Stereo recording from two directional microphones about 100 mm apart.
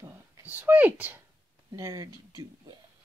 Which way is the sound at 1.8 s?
35° right (ahead or behind).